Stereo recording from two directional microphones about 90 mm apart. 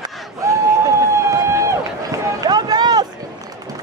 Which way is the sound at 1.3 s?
35° right (ahead or behind).